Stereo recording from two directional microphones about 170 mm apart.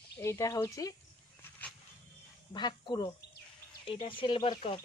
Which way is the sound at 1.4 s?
10° left (ahead or behind).